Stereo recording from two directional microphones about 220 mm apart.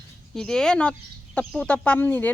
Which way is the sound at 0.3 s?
5° left (ahead or behind).